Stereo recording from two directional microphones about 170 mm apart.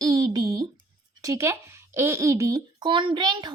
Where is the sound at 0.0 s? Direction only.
20° right (ahead or behind).